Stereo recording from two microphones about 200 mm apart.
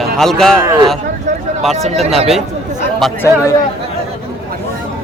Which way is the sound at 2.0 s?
30° right (ahead or behind).